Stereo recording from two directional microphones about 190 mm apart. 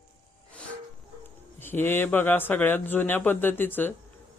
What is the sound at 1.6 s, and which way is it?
Speech, 10° left (ahead or behind).